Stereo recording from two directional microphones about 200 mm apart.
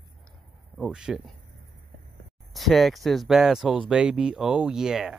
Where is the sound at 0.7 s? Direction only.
Centre (ahead or behind).